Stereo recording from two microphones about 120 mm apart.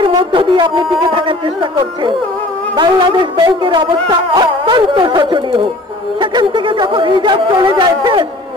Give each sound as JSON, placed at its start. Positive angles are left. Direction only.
{"t": 0.0, "sound": "music", "side_deg": -45}
{"t": 6.3, "sound": "speech", "side_deg": -40}